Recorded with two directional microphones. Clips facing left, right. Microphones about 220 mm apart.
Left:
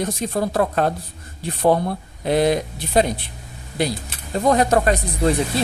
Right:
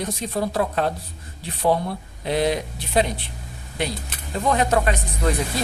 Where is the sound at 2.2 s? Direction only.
45° left (ahead or behind).